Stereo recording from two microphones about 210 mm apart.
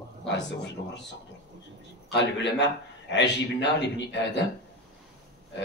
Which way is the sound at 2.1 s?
55° left (ahead or behind).